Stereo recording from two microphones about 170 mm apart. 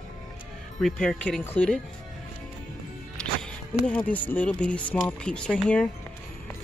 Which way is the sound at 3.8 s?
10° left (ahead or behind).